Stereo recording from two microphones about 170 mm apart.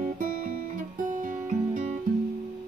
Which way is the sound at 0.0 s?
50° right (ahead or behind).